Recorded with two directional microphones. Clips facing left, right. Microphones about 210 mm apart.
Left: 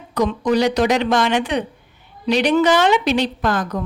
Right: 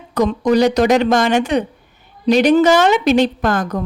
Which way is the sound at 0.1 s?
45° right (ahead or behind).